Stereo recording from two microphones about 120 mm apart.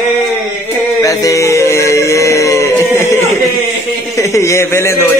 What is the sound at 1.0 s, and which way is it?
Music, 25° left (ahead or behind).